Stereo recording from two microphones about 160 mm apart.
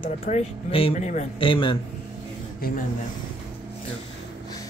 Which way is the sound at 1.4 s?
30° left (ahead or behind).